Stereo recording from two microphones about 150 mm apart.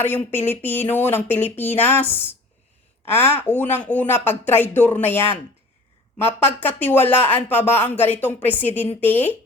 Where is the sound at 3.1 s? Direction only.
15° left (ahead or behind).